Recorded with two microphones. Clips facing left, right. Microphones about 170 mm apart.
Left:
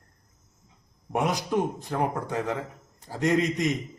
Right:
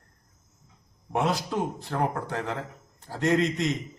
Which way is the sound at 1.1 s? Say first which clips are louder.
Left 1 dB; 15° left (ahead or behind).